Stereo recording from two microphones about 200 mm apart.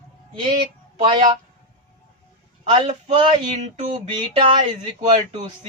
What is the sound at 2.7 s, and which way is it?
Speech, 30° right (ahead or behind).